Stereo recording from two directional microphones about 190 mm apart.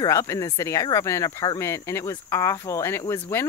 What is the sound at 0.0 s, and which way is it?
Speech, 15° left (ahead or behind).